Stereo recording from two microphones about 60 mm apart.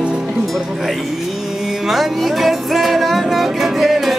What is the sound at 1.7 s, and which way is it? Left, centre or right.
Music, centre.